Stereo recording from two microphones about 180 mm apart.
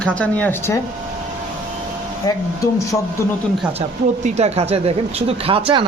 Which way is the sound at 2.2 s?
20° left (ahead or behind).